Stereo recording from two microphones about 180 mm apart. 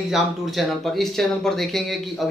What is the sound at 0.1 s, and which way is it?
Speech, centre (ahead or behind).